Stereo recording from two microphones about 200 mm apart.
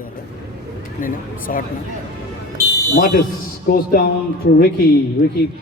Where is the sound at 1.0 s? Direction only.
45° left (ahead or behind).